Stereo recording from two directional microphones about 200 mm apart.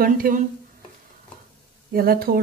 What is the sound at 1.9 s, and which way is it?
Speech, 45° right (ahead or behind).